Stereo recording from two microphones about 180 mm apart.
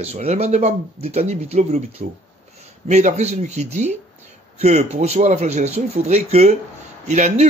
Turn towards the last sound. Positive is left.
turn(degrees=-35)  # may be behind; listen again after turning